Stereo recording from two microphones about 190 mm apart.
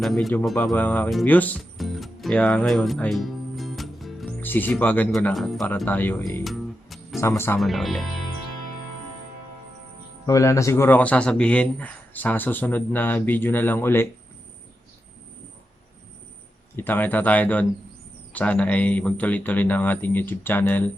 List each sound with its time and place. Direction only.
0.0 s speech: centre (ahead or behind)
6.4 s music: centre (ahead or behind)
7.2 s speech: 15° left (ahead or behind)
7.6 s speech: centre (ahead or behind)
10.2 s speech: 15° left (ahead or behind)
16.7 s speech: 10° left (ahead or behind)